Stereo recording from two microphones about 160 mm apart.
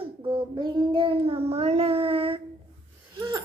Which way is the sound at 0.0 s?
30° right (ahead or behind).